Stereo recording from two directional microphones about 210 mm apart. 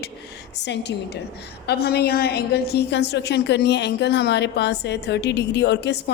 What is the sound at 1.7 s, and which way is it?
A woman's voice, 50° left (ahead or behind).